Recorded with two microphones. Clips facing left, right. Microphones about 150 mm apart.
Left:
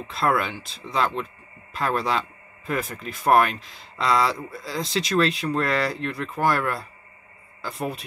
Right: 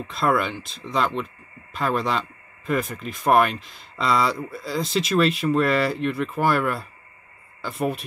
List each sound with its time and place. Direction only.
0.1 s speech: centre (ahead or behind)